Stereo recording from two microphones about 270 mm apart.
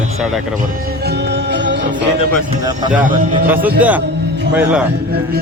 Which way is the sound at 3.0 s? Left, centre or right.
Right.